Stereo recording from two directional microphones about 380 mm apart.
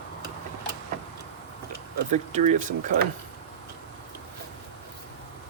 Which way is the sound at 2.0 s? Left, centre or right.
Centre.